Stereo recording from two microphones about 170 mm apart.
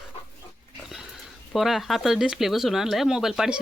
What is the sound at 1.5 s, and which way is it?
Speech, centre (ahead or behind).